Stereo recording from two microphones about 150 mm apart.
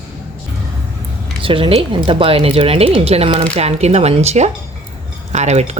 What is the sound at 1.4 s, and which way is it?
Speech, 35° right (ahead or behind).